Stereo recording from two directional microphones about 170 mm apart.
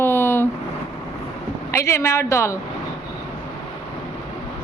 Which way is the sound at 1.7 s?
15° left (ahead or behind).